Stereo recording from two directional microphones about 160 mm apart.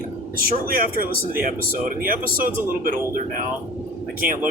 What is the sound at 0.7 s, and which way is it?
Speech, 65° right (ahead or behind).